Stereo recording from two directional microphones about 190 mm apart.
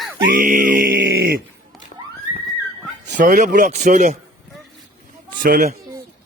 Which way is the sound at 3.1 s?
45° right (ahead or behind).